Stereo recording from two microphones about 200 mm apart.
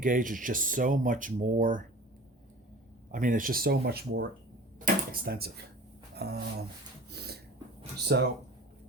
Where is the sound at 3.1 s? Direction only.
40° right (ahead or behind).